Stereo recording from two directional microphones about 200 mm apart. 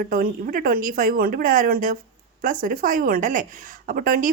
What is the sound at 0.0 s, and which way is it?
A woman's voice, 45° right (ahead or behind).